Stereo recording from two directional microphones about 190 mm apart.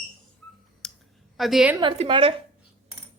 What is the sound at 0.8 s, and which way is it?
Clicking, 5° left (ahead or behind).